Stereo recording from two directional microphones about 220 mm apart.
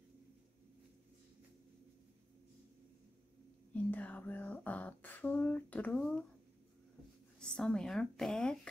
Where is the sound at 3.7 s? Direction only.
5° left (ahead or behind).